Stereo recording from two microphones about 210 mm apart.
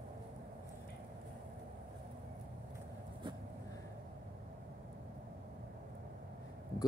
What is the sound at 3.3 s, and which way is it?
Vehicle, 20° right (ahead or behind).